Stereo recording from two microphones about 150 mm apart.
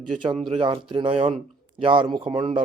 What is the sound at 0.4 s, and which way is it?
Speech, 35° right (ahead or behind).